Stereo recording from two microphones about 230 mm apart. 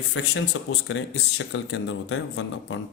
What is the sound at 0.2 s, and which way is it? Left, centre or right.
Speech, left.